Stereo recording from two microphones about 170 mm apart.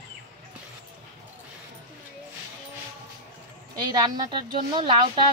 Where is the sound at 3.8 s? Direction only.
25° right (ahead or behind).